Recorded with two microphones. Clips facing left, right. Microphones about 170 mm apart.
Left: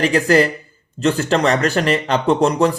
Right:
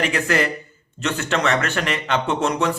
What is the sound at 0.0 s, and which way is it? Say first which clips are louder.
Speech: left 6 dB; 35° left (ahead or behind).